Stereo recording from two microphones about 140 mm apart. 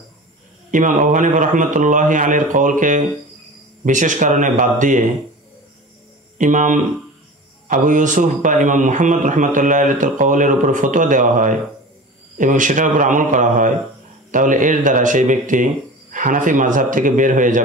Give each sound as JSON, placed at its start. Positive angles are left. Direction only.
{"t": 0.7, "sound": "a man's voice", "side_deg": -70}
{"t": 6.3, "sound": "a man's voice", "side_deg": -65}